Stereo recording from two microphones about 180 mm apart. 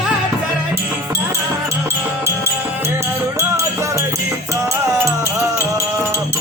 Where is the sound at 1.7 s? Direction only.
15° right (ahead or behind).